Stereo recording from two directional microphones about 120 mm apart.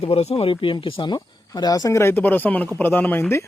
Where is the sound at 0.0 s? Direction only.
55° left (ahead or behind).